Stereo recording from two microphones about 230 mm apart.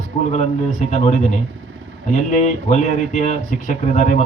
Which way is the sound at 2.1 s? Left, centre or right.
Left.